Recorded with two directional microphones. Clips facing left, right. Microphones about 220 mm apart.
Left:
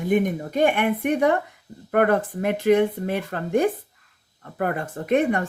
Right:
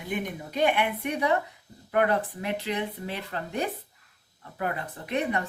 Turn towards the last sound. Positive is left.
turn(degrees=50)  # may be behind; listen again after turning